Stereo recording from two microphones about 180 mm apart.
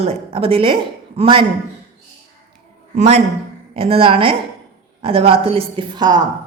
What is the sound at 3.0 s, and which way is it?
A woman's voice, 40° right (ahead or behind).